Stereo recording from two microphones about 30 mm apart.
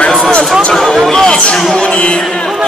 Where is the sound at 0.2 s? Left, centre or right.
Left.